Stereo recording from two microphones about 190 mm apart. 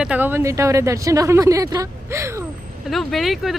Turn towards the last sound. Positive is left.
turn(degrees=0)  # may be behind; listen again after turning